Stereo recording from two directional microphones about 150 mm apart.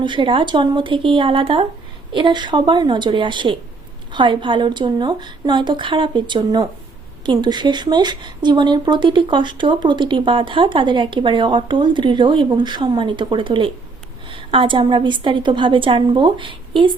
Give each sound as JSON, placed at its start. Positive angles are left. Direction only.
{"t": 0.0, "sound": "speech", "side_deg": -35}